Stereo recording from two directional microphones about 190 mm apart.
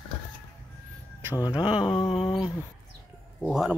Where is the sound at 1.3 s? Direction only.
20° left (ahead or behind).